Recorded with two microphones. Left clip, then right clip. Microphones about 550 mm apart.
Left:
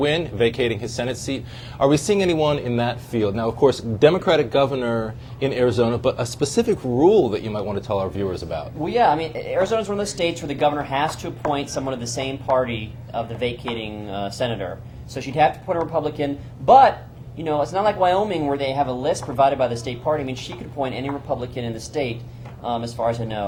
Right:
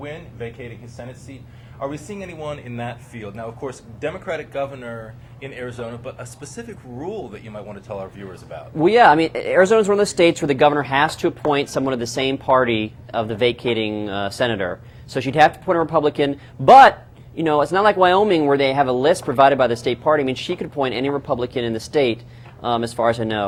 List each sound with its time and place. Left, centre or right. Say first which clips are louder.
0.0 s speech: left 13 dB; left
8.8 s a man's voice: right 6 dB; right